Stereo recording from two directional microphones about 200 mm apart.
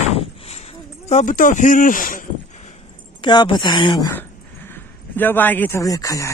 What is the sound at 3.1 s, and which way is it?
Speech, 20° left (ahead or behind).